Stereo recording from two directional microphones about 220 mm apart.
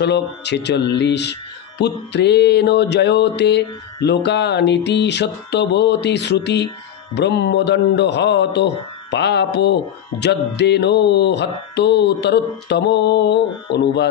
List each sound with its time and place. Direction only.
0.0 s music: 50° left (ahead or behind)